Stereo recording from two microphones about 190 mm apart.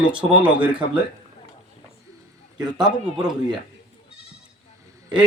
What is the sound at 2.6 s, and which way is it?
Speech, 20° right (ahead or behind).